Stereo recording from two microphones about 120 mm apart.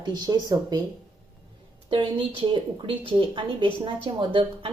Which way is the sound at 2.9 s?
45° right (ahead or behind).